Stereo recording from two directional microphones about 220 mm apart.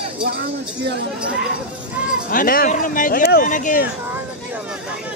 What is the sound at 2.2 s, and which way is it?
Speech, 40° left (ahead or behind).